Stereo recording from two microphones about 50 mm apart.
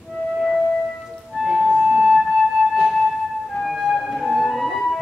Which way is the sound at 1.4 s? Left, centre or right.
Centre.